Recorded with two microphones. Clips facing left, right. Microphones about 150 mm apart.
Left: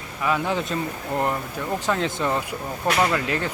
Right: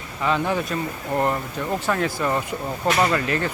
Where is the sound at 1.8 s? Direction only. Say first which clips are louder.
Even; 15° left (ahead or behind).